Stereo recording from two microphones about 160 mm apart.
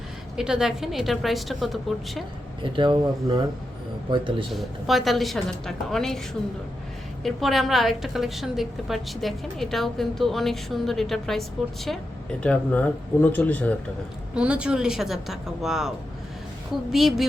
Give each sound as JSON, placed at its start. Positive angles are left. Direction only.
{"t": 0.3, "sound": "a woman's voice", "side_deg": -5}
{"t": 2.7, "sound": "speech", "side_deg": -30}
{"t": 4.5, "sound": "a woman's voice", "side_deg": 0}
{"t": 7.3, "sound": "a woman's voice", "side_deg": 0}
{"t": 14.3, "sound": "a woman's voice", "side_deg": -5}
{"t": 16.9, "sound": "a woman's voice", "side_deg": 0}